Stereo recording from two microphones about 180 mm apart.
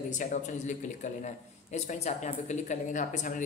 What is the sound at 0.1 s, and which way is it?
Speech, 45° left (ahead or behind).